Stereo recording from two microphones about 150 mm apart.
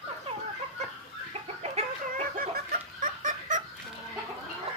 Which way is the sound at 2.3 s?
75° right (ahead or behind).